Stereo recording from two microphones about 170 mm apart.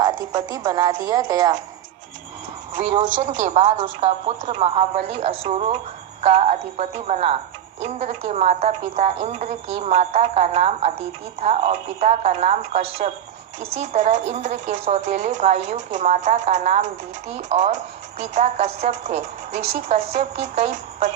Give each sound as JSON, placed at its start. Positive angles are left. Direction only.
{"t": 0.0, "sound": "a woman's voice", "side_deg": -25}
{"t": 3.2, "sound": "a woman's voice", "side_deg": -40}